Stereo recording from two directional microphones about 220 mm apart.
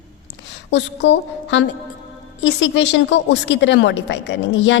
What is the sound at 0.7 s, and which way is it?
A woman's voice, 55° left (ahead or behind).